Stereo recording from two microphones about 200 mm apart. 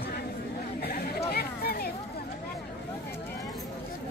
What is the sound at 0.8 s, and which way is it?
Chatter, 50° left (ahead or behind).